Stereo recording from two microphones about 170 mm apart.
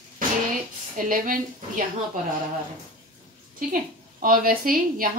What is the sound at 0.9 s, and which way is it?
Speech, 50° right (ahead or behind).